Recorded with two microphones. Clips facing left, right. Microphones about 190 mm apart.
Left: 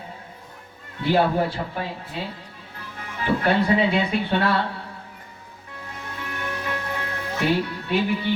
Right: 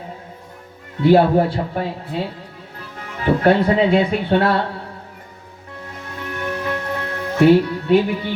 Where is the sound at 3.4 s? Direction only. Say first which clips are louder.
Right 5 dB; 45° right (ahead or behind).